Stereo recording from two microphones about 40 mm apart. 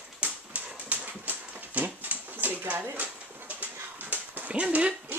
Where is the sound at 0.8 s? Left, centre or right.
Right.